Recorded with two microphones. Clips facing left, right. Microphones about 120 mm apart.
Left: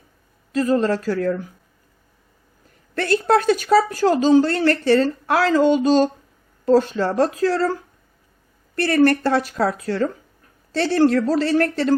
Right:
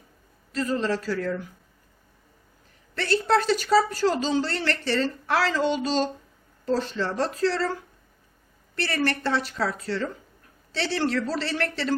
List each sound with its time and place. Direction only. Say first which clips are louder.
0.5 s speech: left 7 dB; 50° left (ahead or behind)
2.9 s speech: left 5 dB; 50° left (ahead or behind)